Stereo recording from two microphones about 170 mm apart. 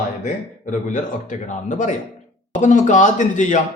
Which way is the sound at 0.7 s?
50° left (ahead or behind).